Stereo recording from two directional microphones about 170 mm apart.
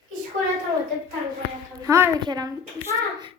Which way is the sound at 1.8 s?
15° right (ahead or behind).